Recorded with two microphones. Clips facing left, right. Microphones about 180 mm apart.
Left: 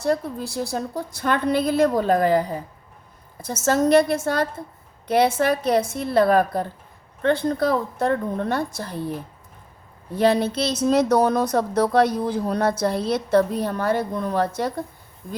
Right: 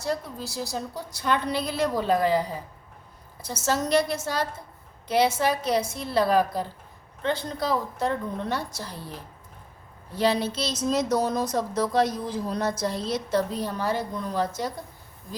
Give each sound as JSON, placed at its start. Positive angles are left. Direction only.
{"t": 0.0, "sound": "a woman's voice", "side_deg": 55}